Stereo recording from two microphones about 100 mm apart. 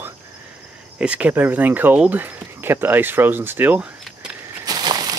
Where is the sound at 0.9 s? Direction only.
10° right (ahead or behind).